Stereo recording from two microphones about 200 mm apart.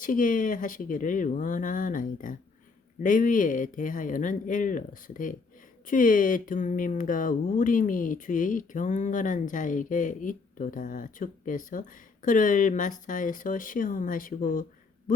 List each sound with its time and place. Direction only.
0.0 s speech: 40° left (ahead or behind)